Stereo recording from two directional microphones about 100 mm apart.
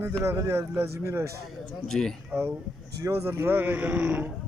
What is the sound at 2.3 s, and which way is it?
Speech, 25° right (ahead or behind).